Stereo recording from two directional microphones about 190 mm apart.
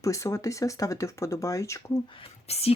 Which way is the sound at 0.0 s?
15° left (ahead or behind).